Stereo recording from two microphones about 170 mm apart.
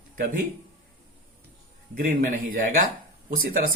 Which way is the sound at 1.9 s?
55° right (ahead or behind).